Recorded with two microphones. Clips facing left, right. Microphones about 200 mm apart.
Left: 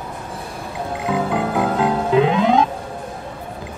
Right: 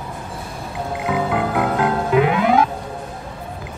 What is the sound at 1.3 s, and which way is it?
Music, 25° left (ahead or behind).